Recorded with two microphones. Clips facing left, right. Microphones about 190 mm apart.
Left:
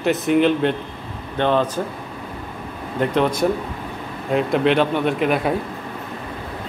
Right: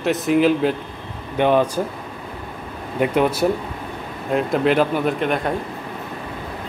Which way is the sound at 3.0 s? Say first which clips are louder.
Right 1 dB; 5° right (ahead or behind).